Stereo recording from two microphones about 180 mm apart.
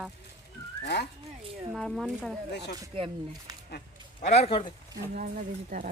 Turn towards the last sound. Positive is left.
turn(degrees=-50)  # may be behind; listen again after turning